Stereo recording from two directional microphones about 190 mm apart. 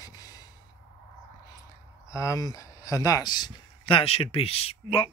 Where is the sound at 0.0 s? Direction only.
20° left (ahead or behind).